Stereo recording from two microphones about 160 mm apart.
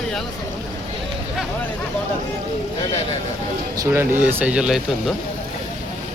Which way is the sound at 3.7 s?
20° right (ahead or behind).